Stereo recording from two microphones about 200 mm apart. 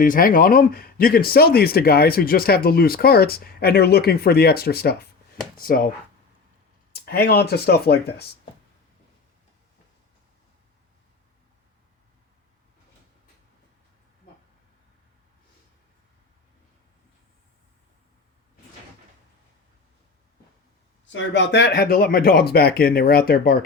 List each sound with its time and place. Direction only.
0.0 s speech: 45° left (ahead or behind)
6.9 s speech: 50° left (ahead or behind)
21.1 s speech: 65° left (ahead or behind); by 23.6 s 50° left (ahead or behind)